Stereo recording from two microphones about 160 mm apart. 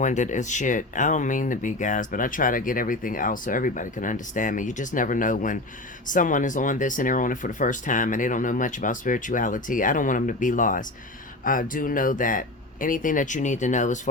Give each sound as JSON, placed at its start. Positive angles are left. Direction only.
{"t": 0.0, "sound": "speech", "side_deg": 50}